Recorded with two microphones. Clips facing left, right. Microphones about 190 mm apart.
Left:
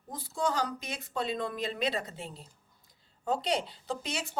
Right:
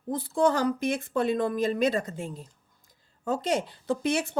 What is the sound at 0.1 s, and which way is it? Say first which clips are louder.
Speech: right 8 dB; 55° right (ahead or behind).